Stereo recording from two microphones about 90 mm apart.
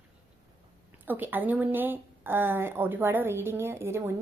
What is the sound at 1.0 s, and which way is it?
Speech, 20° right (ahead or behind).